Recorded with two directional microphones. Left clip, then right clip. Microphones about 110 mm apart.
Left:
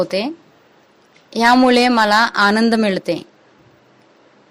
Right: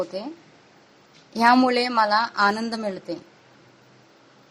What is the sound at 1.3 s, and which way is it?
A woman's voice, 45° left (ahead or behind).